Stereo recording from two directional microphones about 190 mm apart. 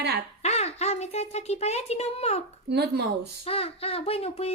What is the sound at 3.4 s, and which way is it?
Speech, 30° left (ahead or behind).